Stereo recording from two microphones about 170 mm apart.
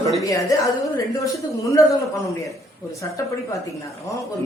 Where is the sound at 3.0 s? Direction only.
20° left (ahead or behind).